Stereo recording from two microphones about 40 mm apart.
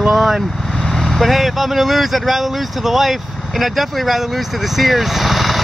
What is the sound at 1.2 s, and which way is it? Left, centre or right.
Speech, centre.